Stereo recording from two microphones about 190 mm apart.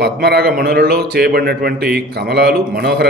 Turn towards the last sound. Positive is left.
turn(degrees=-60)  # may be behind; listen again after turning